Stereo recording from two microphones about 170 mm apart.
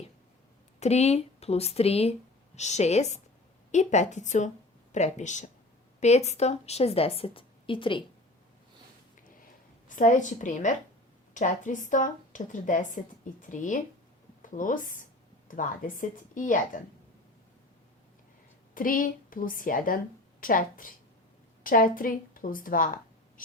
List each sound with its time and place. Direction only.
0.8 s a woman's voice: 40° left (ahead or behind)
9.9 s a woman's voice: 50° left (ahead or behind)
18.7 s a woman's voice: 55° left (ahead or behind)